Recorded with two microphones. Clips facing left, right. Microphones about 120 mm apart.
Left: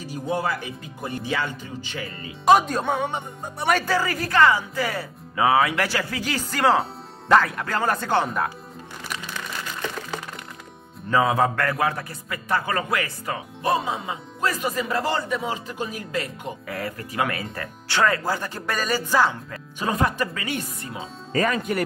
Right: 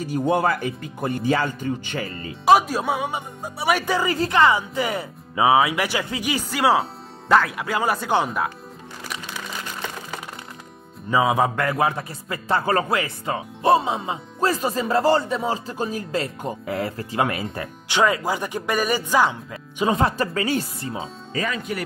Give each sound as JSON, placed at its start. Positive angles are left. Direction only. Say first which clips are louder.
{"t": 0.1, "sound": "speech", "louder": "right 5 dB", "side_deg": -55}
{"t": 2.4, "sound": "speech", "louder": "right 1 dB", "side_deg": -5}
{"t": 3.8, "sound": "speech", "louder": "right 2 dB", "side_deg": -20}
{"t": 11.1, "sound": "a man's voice", "louder": "right 1 dB", "side_deg": -15}
{"t": 20.0, "sound": "speech", "louder": "right 3 dB", "side_deg": -30}
{"t": 21.3, "sound": "speech", "louder": "left 5 dB", "side_deg": 45}